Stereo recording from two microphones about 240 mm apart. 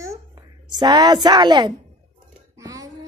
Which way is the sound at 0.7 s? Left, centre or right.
Centre.